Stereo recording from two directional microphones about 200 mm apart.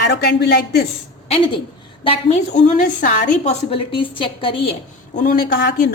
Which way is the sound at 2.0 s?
30° left (ahead or behind).